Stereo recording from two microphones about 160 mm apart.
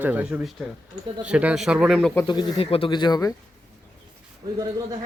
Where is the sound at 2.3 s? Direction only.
30° left (ahead or behind).